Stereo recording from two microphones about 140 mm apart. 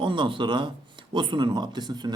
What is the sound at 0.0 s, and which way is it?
Speech, 35° right (ahead or behind).